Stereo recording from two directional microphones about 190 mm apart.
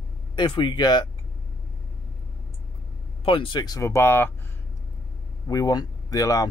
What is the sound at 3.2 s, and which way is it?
Speech, 25° left (ahead or behind).